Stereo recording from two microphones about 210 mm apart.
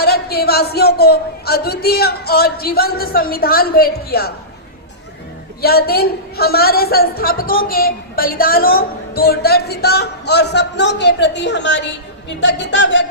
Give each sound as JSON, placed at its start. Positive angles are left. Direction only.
{"t": 0.0, "sound": "a man's voice", "side_deg": 50}
{"t": 5.6, "sound": "a man's voice", "side_deg": 45}